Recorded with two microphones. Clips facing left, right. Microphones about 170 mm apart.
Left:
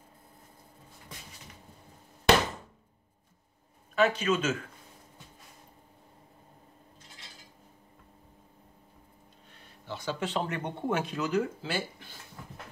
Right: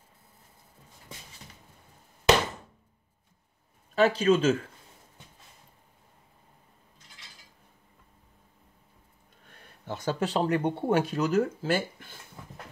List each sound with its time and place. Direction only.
3.9 s speech: 30° right (ahead or behind)
9.5 s speech: 45° right (ahead or behind)